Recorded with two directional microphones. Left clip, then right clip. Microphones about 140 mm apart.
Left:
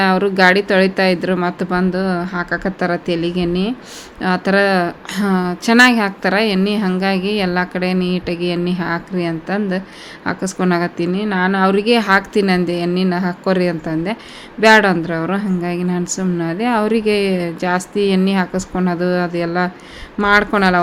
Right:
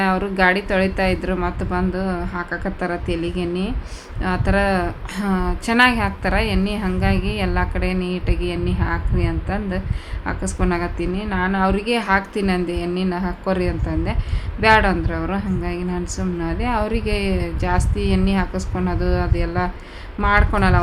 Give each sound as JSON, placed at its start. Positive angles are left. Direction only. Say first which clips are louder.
{"t": 0.0, "sound": "a woman's voice", "louder": "left 5 dB", "side_deg": 20}